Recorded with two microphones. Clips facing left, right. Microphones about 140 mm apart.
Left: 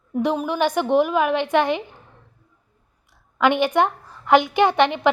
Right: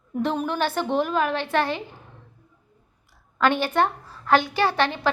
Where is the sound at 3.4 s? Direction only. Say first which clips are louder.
Left 3 dB; 15° left (ahead or behind).